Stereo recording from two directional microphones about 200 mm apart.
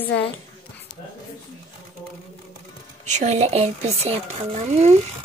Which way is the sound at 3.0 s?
35° right (ahead or behind).